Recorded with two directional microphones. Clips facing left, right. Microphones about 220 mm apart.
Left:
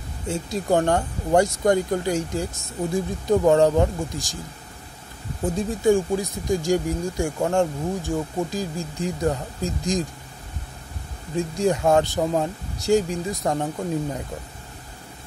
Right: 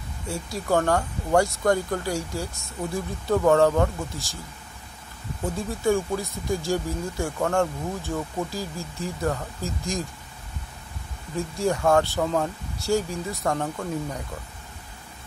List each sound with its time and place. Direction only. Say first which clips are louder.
0.3 s speech: left 3 dB; 20° left (ahead or behind)
5.4 s speech: left 4 dB; 15° left (ahead or behind)
11.3 s speech: left 3 dB; 15° left (ahead or behind)